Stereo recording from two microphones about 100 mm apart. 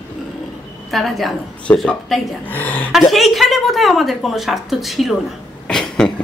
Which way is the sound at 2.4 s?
15° left (ahead or behind).